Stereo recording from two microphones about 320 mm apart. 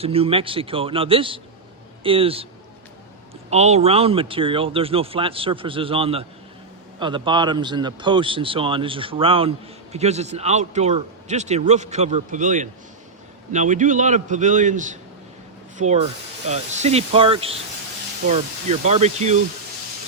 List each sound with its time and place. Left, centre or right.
0.0 s speech: centre
3.5 s a man's voice: centre